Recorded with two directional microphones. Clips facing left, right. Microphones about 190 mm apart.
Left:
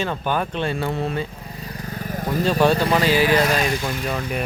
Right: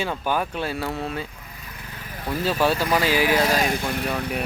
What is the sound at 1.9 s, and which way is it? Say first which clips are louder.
Vehicle: left 4 dB; 40° left (ahead or behind).